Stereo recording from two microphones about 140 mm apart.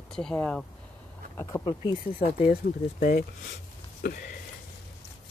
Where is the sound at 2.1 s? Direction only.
90° left.